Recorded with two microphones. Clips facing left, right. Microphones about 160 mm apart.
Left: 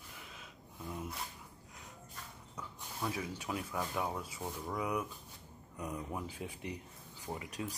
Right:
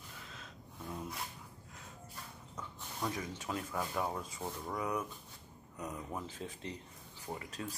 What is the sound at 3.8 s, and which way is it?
Speech, centre (ahead or behind).